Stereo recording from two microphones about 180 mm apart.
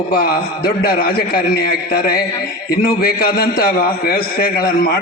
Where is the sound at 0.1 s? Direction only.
60° left (ahead or behind).